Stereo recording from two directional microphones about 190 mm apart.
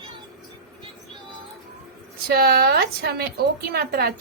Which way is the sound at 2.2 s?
55° right (ahead or behind).